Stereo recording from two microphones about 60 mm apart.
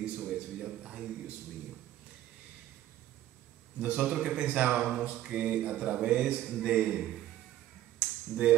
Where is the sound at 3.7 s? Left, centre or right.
Right.